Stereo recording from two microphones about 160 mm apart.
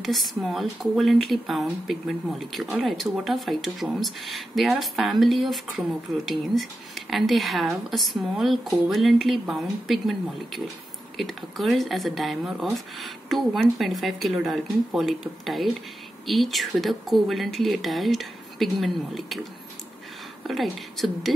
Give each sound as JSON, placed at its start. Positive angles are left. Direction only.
{"t": 0.0, "sound": "speech", "side_deg": 0}
{"t": 20.4, "sound": "speech", "side_deg": 0}